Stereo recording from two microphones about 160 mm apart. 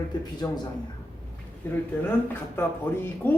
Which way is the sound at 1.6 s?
10° left (ahead or behind).